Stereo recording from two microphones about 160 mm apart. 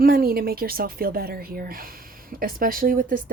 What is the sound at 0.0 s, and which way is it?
A woman's voice, 65° right (ahead or behind).